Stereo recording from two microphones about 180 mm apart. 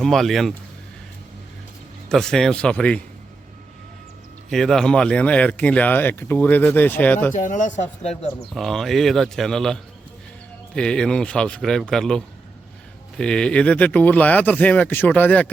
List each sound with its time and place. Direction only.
0.0 s speech: centre (ahead or behind)
2.0 s speech: 5° left (ahead or behind)
4.4 s speech: centre (ahead or behind)
7.4 s speech: 45° left (ahead or behind)
8.5 s speech: centre (ahead or behind)